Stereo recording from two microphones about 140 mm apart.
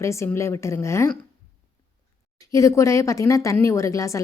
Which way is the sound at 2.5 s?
20° left (ahead or behind).